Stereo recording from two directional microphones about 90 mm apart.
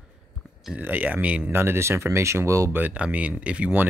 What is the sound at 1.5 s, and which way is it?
Speech, 25° right (ahead or behind).